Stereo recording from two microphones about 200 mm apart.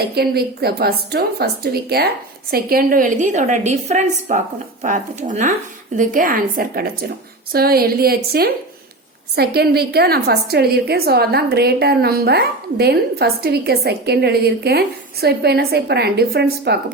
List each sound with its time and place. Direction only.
0.2 s a woman's voice: 50° right (ahead or behind)